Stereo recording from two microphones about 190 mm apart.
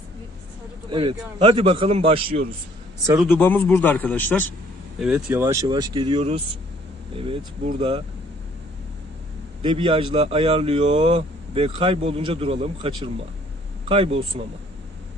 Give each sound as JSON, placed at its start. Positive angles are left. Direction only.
{"t": 0.8, "sound": "a man's voice", "side_deg": -25}
{"t": 3.2, "sound": "a man's voice", "side_deg": 10}
{"t": 5.0, "sound": "a man's voice", "side_deg": -10}
{"t": 9.6, "sound": "a man's voice", "side_deg": -25}